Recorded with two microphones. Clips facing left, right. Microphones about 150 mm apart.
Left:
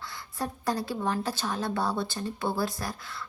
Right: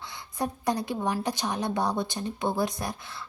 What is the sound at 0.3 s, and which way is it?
Speech, 20° right (ahead or behind).